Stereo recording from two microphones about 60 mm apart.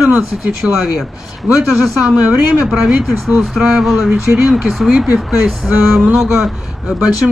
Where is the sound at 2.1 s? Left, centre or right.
Centre.